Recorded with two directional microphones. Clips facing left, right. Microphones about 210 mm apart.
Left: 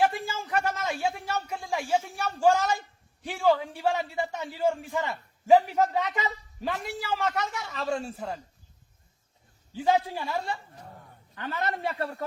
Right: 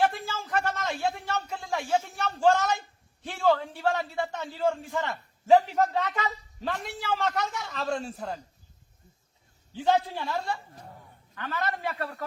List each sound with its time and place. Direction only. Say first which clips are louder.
0.0 s a sound: left 1 dB; 10° left (ahead or behind)
3.2 s a man's voice: left 1 dB; 10° left (ahead or behind)
9.7 s a man's voice: even; 5° left (ahead or behind)
11.3 s a man's voice: left 1 dB; 25° left (ahead or behind)